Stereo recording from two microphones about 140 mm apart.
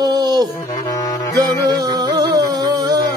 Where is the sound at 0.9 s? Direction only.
25° left (ahead or behind).